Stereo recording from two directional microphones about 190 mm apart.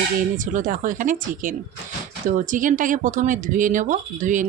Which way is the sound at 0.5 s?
45° right (ahead or behind).